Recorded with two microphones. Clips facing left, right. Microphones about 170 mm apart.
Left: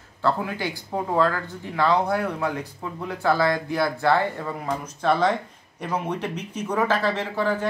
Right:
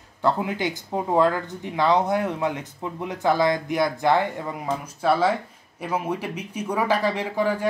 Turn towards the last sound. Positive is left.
turn(degrees=-10)  # may be behind; listen again after turning